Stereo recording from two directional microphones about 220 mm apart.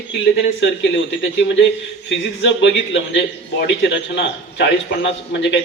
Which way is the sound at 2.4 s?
55° left (ahead or behind).